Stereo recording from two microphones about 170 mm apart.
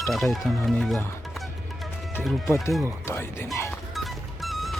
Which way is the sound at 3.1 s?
15° left (ahead or behind).